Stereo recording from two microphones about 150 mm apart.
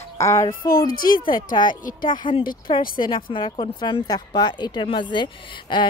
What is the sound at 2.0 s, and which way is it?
Speech, 30° left (ahead or behind).